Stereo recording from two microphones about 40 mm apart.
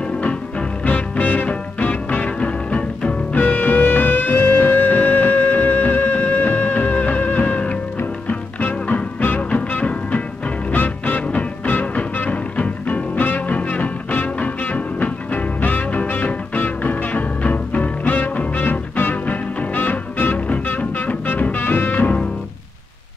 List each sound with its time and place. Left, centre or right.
0.2 s music: left
0.8 s music: left
1.5 s music: left
3.3 s music: left
6.4 s music: left
19.2 s music: left
20.3 s music: left
20.6 s music: left